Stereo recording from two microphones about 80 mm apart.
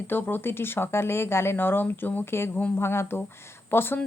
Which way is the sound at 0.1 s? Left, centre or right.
Left.